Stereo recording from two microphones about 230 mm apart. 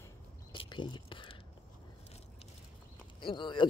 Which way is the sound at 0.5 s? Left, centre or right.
Left.